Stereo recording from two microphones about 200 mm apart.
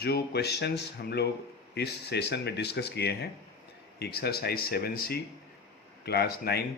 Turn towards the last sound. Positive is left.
turn(degrees=55)  # may be behind; listen again after turning